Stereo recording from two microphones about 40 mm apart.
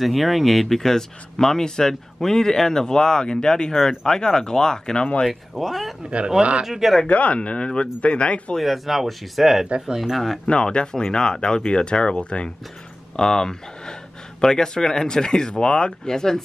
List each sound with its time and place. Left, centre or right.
0.0 s speech: centre
5.3 s speech: centre
6.0 s speech: right
6.6 s speech: centre
7.1 s speech: left
8.5 s speech: centre
10.1 s speech: centre
10.4 s speech: left
13.1 s speech: centre